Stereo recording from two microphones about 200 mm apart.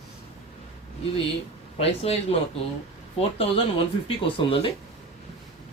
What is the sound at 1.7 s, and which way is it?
Speech, 30° left (ahead or behind).